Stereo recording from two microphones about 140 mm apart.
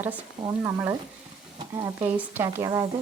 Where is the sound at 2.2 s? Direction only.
15° right (ahead or behind).